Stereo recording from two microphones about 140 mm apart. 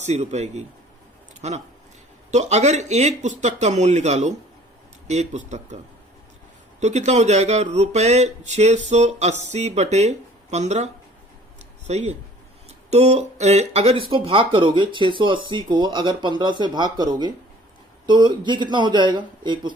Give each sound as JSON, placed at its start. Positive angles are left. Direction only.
{"t": 0.0, "sound": "speech", "side_deg": -50}
{"t": 11.9, "sound": "speech", "side_deg": -55}